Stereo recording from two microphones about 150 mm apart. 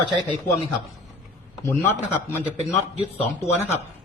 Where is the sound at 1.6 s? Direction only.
15° left (ahead or behind).